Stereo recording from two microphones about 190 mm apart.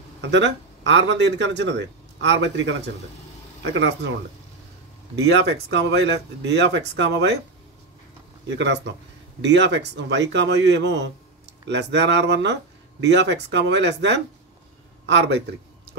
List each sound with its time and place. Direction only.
0.2 s speech: 70° right (ahead or behind)
3.7 s speech: 70° right (ahead or behind)
5.1 s speech: 65° right (ahead or behind)
8.5 s a man's voice: 70° right (ahead or behind)